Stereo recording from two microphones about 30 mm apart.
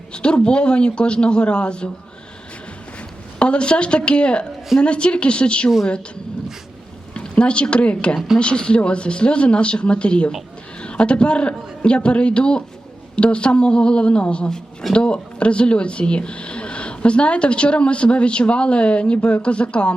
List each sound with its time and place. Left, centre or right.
0.1 s speech: left
3.3 s speech: left
7.1 s a woman's voice: left